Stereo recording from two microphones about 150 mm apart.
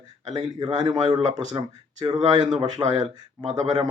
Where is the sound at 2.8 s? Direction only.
45° right (ahead or behind).